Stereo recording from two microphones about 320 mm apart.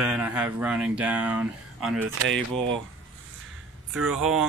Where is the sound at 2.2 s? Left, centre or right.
Right.